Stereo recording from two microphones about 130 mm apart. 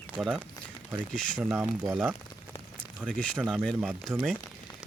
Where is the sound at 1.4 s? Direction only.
15° right (ahead or behind).